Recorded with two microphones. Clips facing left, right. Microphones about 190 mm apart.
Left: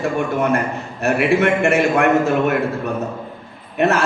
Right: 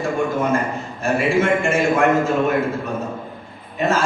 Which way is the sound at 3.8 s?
65° left (ahead or behind).